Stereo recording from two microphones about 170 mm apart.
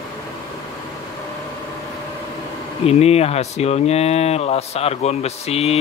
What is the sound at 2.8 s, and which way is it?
Speech, 40° left (ahead or behind).